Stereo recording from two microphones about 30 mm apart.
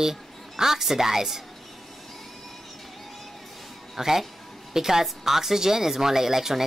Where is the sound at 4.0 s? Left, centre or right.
Centre.